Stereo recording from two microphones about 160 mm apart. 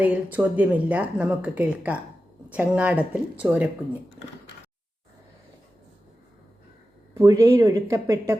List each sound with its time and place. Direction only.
0.0 s a woman's voice: 10° right (ahead or behind)
7.1 s speech: 20° right (ahead or behind)